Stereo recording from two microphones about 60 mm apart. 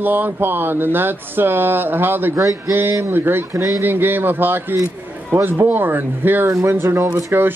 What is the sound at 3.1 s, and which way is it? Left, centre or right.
Speech, right.